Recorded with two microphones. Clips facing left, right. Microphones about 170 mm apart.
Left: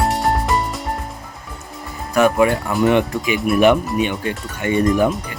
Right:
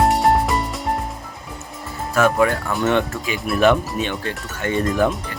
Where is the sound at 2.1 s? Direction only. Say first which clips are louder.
Left 2 dB; 15° left (ahead or behind).